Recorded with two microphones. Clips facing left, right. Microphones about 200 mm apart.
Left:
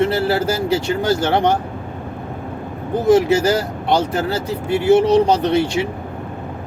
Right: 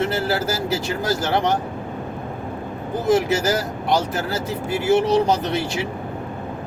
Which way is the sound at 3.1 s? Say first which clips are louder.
Left 5 dB; 30° left (ahead or behind).